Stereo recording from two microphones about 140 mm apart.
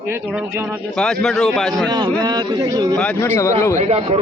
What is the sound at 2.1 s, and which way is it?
Speech, 30° right (ahead or behind).